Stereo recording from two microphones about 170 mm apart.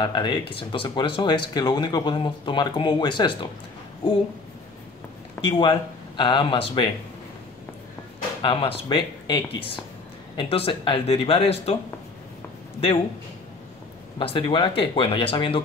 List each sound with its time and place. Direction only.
0.0 s speech: 25° left (ahead or behind)
5.4 s speech: 30° left (ahead or behind)
8.4 s speech: 30° left (ahead or behind)
14.1 s speech: 30° left (ahead or behind)